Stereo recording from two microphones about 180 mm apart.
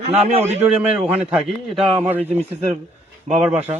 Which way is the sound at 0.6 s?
5° right (ahead or behind).